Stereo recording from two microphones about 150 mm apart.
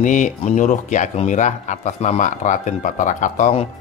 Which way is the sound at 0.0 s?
55° left (ahead or behind).